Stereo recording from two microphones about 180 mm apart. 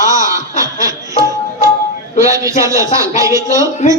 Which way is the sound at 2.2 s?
20° right (ahead or behind).